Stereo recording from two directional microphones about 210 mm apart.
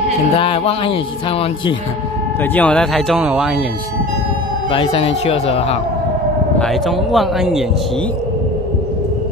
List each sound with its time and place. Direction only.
0.4 s speech: 25° left (ahead or behind)
2.5 s speech: 5° left (ahead or behind)
4.6 s speech: 25° left (ahead or behind)
6.6 s speech: centre (ahead or behind)